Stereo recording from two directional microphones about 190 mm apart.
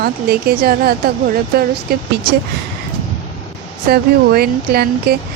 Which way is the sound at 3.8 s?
55° right (ahead or behind).